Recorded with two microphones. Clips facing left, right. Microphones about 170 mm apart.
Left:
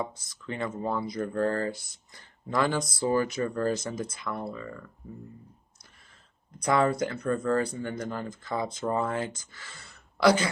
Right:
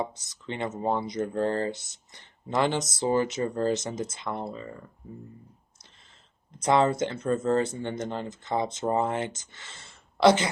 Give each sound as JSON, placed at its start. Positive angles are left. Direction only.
{"t": 0.0, "sound": "speech", "side_deg": -25}
{"t": 6.6, "sound": "speech", "side_deg": -25}